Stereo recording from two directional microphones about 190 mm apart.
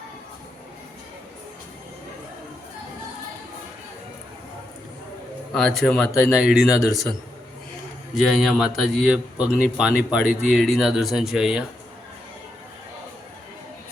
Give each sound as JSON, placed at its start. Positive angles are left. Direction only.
{"t": 5.5, "sound": "a man's voice", "side_deg": 0}
{"t": 8.1, "sound": "a man's voice", "side_deg": 0}